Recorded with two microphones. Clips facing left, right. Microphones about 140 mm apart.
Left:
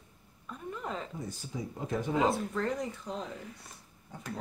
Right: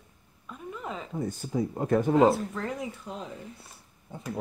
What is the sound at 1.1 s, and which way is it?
Speech, 60° right (ahead or behind).